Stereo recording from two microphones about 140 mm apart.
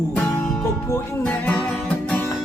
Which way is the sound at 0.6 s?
20° left (ahead or behind).